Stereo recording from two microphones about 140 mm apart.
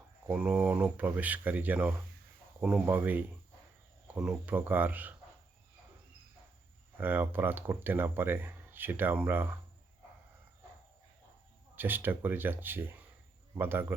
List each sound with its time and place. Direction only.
0.3 s speech: 10° right (ahead or behind)
7.0 s speech: 10° right (ahead or behind)
11.8 s speech: 15° right (ahead or behind)